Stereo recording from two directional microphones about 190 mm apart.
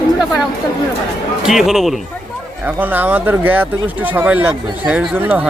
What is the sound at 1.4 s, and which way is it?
Speech, centre (ahead or behind).